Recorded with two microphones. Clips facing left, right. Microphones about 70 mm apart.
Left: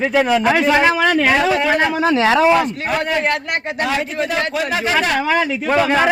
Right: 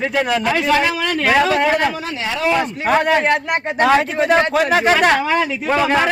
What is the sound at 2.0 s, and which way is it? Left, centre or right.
Speech, left.